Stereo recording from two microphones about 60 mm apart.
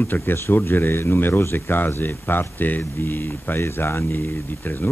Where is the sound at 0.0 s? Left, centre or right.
Left.